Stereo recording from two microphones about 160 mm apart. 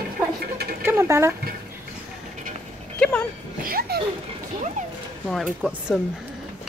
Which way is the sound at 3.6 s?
65° right (ahead or behind).